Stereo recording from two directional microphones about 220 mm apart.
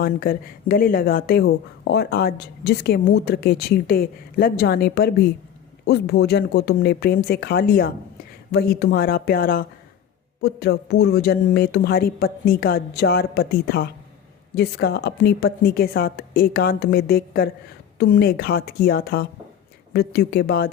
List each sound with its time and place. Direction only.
0.0 s speech: 40° left (ahead or behind)